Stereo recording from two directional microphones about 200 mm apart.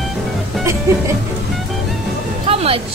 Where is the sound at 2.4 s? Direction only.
30° right (ahead or behind).